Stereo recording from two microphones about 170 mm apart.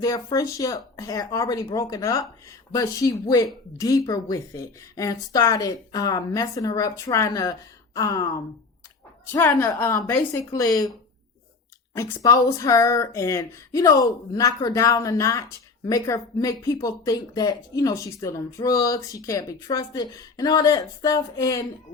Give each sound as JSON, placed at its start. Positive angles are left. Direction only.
{"t": 0.0, "sound": "a woman's voice", "side_deg": 20}
{"t": 11.9, "sound": "speech", "side_deg": 20}